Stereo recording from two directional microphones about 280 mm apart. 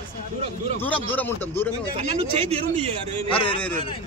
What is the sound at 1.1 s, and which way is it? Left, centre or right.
Speech, centre.